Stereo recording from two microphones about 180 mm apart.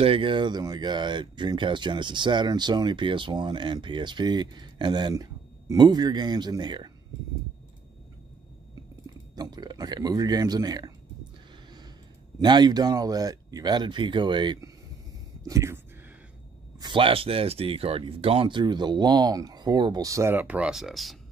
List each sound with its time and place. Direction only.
0.0 s speech: 30° right (ahead or behind)
9.0 s speech: 20° right (ahead or behind)
12.4 s speech: 25° right (ahead or behind)
16.8 s speech: 30° right (ahead or behind); by 21.2 s centre (ahead or behind)